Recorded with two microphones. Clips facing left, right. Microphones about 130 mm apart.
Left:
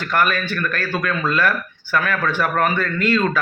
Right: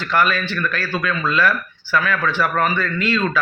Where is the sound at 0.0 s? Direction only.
50° left (ahead or behind).